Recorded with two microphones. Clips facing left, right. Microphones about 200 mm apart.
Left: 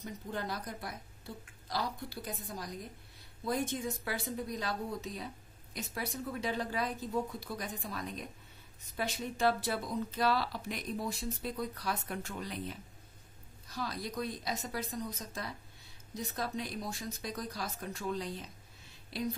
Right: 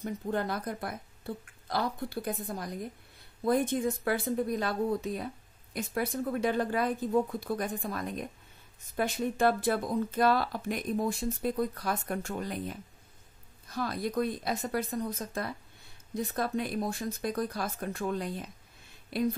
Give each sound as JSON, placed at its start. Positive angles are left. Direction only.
{"t": 0.0, "sound": "speech", "side_deg": -55}